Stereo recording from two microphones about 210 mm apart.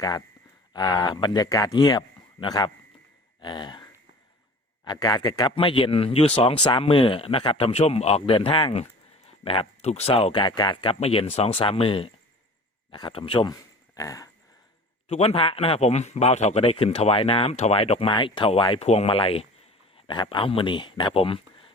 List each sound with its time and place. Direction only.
0.7 s speech: 20° left (ahead or behind)
4.9 s speech: 20° left (ahead or behind)
15.1 s speech: 30° left (ahead or behind)